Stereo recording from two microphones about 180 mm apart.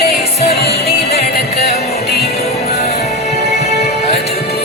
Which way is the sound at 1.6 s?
35° left (ahead or behind).